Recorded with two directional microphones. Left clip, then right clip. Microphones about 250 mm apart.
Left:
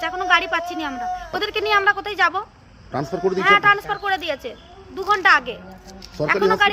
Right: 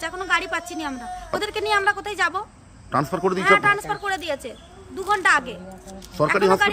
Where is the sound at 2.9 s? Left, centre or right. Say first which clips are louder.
Right 1 dB; centre.